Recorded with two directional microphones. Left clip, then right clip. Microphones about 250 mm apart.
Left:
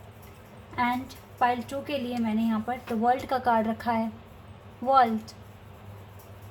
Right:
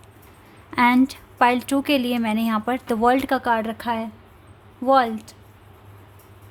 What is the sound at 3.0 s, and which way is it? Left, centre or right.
A woman's voice, right.